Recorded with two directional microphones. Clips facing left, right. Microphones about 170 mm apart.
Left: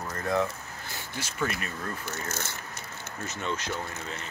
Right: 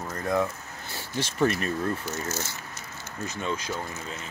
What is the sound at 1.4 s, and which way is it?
Speech, 35° right (ahead or behind).